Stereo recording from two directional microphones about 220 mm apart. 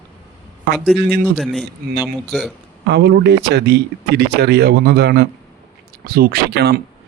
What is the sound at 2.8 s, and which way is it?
Speech, 50° right (ahead or behind).